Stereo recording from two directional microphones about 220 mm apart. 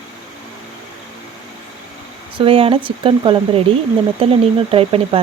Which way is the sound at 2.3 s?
25° right (ahead or behind).